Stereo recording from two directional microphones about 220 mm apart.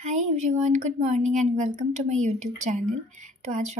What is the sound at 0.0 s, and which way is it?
A woman's voice, 35° right (ahead or behind).